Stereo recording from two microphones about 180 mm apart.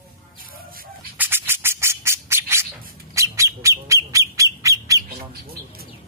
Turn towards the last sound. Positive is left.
turn(degrees=-15)  # may be behind; listen again after turning